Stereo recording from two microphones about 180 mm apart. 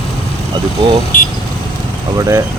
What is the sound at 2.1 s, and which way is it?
Speech, 15° right (ahead or behind).